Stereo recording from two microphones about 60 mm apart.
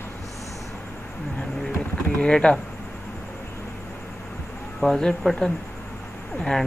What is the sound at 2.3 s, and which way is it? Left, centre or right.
Speech, centre.